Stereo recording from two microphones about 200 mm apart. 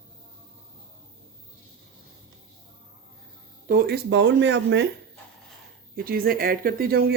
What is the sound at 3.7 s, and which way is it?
Speech, 50° right (ahead or behind).